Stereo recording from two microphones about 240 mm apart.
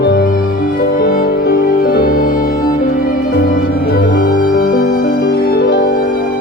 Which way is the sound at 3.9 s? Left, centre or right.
Left.